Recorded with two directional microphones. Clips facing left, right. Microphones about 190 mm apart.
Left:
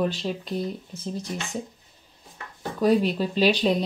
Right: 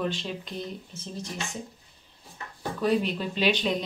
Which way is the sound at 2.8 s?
40° left (ahead or behind).